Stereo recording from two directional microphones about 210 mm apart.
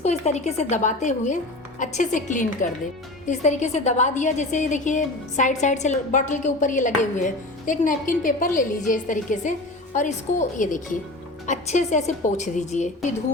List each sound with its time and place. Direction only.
0.0 s a woman's voice: 30° left (ahead or behind)